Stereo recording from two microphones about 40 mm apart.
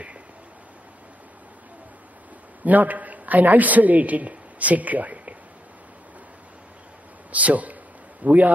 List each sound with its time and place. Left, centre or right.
2.6 s a man's voice: right
7.3 s a man's voice: right